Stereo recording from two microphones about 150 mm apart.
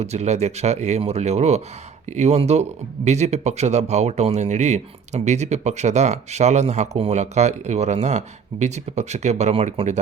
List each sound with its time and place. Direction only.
0.0 s speech: 45° right (ahead or behind)